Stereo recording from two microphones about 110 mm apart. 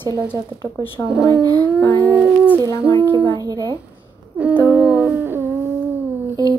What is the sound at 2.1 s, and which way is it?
Speech, 10° right (ahead or behind).